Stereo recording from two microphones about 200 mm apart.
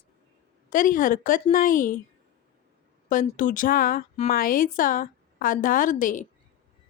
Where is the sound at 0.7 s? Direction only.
45° left (ahead or behind).